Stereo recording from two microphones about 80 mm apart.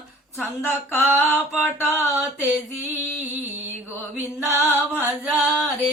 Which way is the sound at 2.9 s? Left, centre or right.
Right.